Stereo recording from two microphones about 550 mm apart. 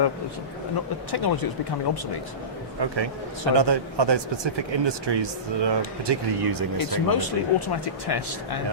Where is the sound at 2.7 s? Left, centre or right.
Right.